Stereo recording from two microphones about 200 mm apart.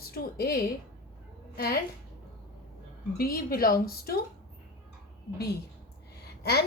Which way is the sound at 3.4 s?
45° left (ahead or behind).